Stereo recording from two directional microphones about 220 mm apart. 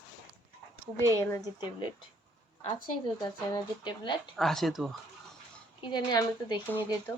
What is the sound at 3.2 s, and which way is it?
Speech, 20° left (ahead or behind).